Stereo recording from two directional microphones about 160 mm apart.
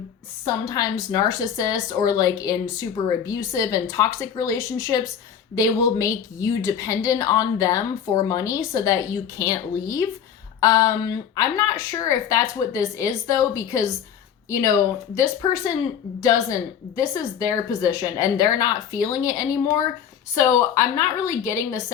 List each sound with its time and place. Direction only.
0.4 s a woman's voice: 20° left (ahead or behind)